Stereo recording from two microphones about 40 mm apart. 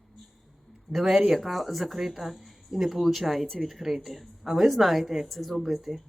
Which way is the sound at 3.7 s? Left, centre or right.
Centre.